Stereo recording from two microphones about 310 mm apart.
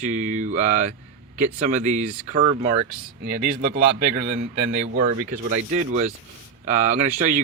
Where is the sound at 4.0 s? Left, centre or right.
Right.